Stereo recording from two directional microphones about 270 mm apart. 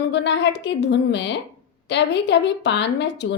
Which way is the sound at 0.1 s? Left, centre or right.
Left.